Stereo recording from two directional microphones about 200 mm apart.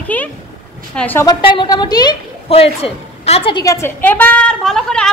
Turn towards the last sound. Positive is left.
turn(degrees=5)  # may be behind; listen again after turning